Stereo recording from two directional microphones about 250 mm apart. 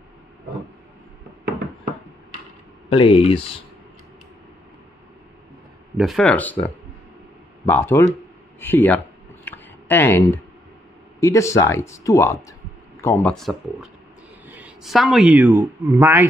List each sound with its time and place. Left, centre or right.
2.9 s speech: left
5.9 s speech: centre
8.5 s a sound: centre
11.1 s a man's voice: centre